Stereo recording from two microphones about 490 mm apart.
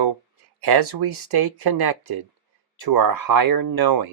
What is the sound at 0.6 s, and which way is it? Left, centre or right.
Speech, right.